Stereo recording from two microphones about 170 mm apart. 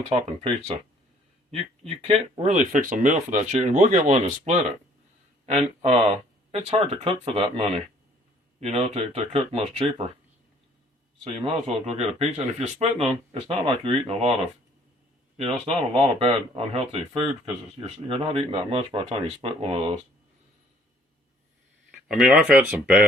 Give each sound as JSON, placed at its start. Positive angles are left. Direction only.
{"t": 0.1, "sound": "speech", "side_deg": -35}
{"t": 2.0, "sound": "speech", "side_deg": -35}
{"t": 11.2, "sound": "speech", "side_deg": -40}
{"t": 15.4, "sound": "speech", "side_deg": -35}
{"t": 22.1, "sound": "speech", "side_deg": -5}